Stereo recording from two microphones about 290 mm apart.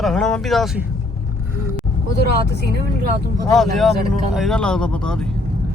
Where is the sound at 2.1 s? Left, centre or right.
Right.